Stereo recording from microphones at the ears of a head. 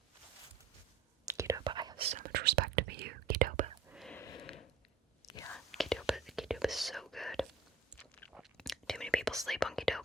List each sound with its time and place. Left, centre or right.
1.2 s whispering: right
4.3 s a sound: left
5.7 s whispering: centre